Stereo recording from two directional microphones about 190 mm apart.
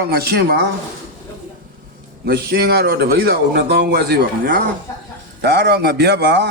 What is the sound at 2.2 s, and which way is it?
A man's voice, 55° right (ahead or behind).